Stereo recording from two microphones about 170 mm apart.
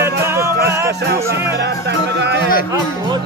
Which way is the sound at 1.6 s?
85° right.